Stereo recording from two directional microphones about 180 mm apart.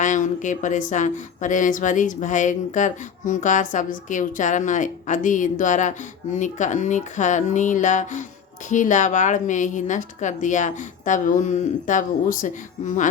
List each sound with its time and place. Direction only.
0.0 s speech: 45° left (ahead or behind)